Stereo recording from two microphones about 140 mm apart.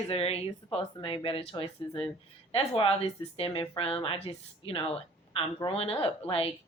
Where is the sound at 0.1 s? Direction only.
45° left (ahead or behind).